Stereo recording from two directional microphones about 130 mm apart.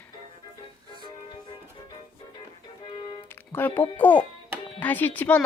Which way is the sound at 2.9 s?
35° left (ahead or behind).